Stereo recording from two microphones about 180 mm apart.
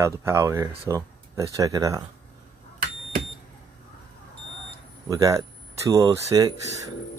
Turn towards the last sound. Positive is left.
turn(degrees=-20)  # may be behind; listen again after turning